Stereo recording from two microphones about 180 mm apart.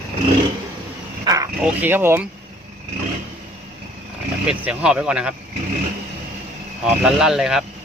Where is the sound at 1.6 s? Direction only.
10° right (ahead or behind).